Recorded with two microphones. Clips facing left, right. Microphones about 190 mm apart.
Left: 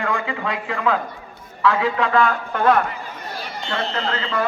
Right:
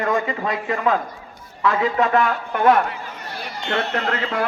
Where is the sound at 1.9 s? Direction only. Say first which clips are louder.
Even; 20° right (ahead or behind).